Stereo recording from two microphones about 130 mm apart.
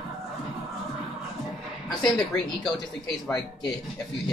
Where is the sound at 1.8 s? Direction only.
5° left (ahead or behind).